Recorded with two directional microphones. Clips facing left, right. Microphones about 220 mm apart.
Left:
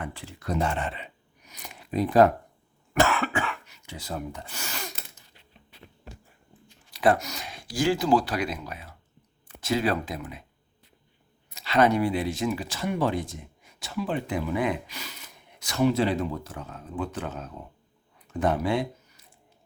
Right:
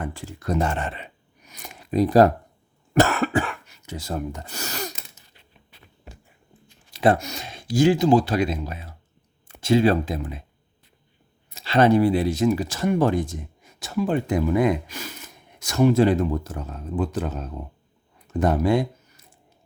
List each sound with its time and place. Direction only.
0.0 s speech: 45° right (ahead or behind)
6.9 s speech: 25° right (ahead or behind)
11.5 s speech: 30° right (ahead or behind)